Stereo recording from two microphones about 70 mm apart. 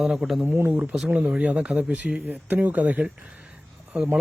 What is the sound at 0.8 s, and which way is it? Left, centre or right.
A man's voice, centre.